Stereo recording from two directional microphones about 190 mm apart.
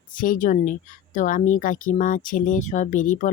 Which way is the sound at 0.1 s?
45° left (ahead or behind).